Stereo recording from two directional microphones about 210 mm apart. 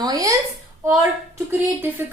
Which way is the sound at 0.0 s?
15° right (ahead or behind).